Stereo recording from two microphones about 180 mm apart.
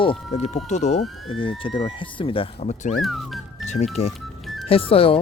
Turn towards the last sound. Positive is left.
turn(degrees=30)  # may be behind; listen again after turning